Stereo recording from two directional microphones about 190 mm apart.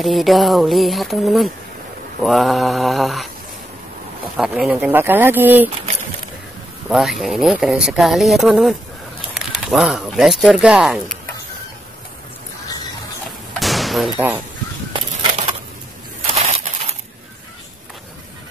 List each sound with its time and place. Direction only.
0.0 s speech: centre (ahead or behind)
4.4 s speech: 5° right (ahead or behind)
6.9 s speech: centre (ahead or behind)
13.5 s slam: centre (ahead or behind)
16.2 s a sound: 35° right (ahead or behind)